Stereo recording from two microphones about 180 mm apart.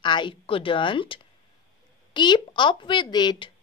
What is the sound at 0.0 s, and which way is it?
Speech, 25° left (ahead or behind).